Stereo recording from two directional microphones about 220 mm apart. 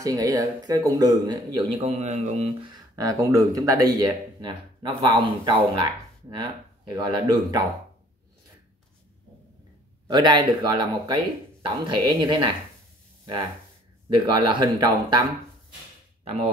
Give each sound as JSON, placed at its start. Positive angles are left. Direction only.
{"t": 0.0, "sound": "speech", "side_deg": -15}
{"t": 6.9, "sound": "speech", "side_deg": -20}
{"t": 10.0, "sound": "speech", "side_deg": -20}
{"t": 14.0, "sound": "speech", "side_deg": -20}